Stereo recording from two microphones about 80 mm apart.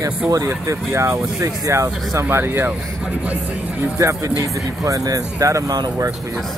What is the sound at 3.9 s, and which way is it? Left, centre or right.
Speech, right.